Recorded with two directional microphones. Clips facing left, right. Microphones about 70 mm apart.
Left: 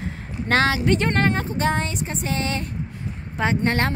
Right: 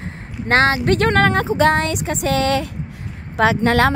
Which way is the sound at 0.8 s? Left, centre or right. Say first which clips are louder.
Right 5 dB; right.